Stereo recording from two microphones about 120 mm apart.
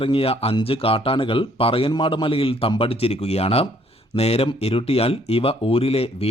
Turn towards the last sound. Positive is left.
turn(degrees=55)  # may be behind; listen again after turning